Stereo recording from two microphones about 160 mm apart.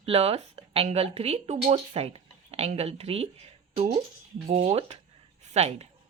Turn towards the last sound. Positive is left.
turn(degrees=-40)  # may be behind; listen again after turning